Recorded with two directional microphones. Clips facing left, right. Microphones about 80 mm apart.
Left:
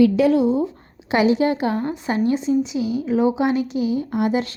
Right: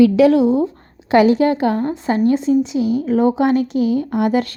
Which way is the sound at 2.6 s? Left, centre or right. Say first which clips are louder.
Right 5 dB; right.